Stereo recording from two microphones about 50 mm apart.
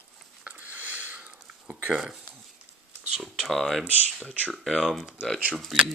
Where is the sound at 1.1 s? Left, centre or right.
Right.